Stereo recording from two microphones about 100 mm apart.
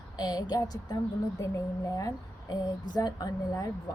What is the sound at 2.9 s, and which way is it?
Speech, 40° left (ahead or behind).